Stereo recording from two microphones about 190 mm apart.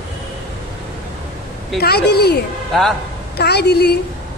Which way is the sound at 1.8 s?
60° left (ahead or behind).